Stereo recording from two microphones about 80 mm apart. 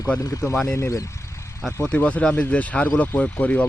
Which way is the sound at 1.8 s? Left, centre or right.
Centre.